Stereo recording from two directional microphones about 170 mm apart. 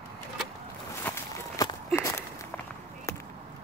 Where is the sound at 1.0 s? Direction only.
15° left (ahead or behind).